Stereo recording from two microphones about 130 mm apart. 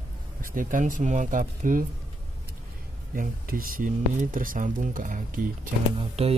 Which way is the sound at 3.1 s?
90° right.